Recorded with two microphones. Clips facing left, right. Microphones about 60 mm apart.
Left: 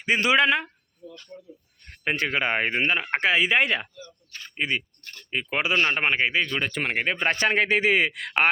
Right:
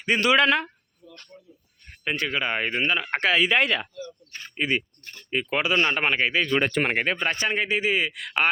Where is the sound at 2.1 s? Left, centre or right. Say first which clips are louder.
Left 2 dB; left; by 4.8 s centre.